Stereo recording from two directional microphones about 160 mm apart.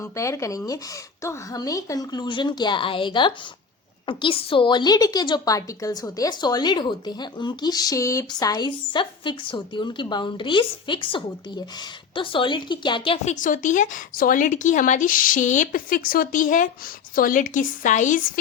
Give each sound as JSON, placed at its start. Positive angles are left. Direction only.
{"t": 0.0, "sound": "a woman's voice", "side_deg": 20}
{"t": 13.2, "sound": "speech", "side_deg": 55}